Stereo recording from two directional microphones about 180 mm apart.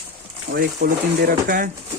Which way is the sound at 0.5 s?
60° right (ahead or behind).